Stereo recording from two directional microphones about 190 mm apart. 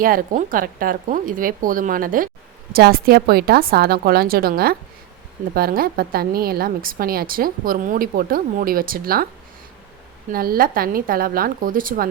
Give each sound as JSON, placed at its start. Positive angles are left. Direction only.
{"t": 0.0, "sound": "a woman's voice", "side_deg": -50}
{"t": 10.3, "sound": "a woman's voice", "side_deg": -50}